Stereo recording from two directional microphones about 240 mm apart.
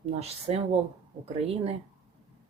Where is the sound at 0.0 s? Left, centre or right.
Right.